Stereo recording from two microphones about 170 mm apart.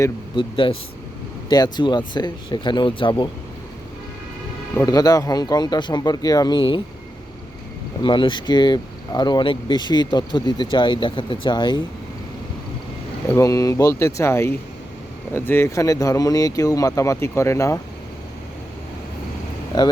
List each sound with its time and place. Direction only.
0.3 s speech: 30° left (ahead or behind)
4.8 s speech: 20° left (ahead or behind)
8.0 s speech: 30° left (ahead or behind)
13.2 s speech: 20° left (ahead or behind)
19.7 s speech: 25° left (ahead or behind)